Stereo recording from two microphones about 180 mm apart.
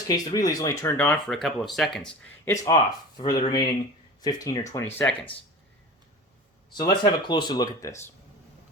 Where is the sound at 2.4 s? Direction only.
20° left (ahead or behind).